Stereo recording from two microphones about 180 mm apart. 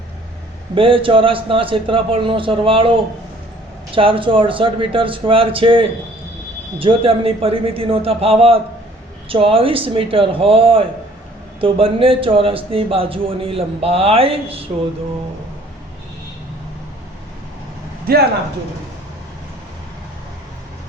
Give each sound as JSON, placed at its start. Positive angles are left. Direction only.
{"t": 0.8, "sound": "a man's voice", "side_deg": -30}
{"t": 3.9, "sound": "a man's voice", "side_deg": -30}
{"t": 18.1, "sound": "speech", "side_deg": -55}